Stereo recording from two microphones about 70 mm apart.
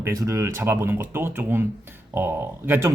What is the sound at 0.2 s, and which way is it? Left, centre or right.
Speech, right.